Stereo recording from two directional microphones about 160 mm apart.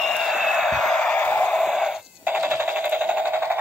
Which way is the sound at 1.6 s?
5° right (ahead or behind).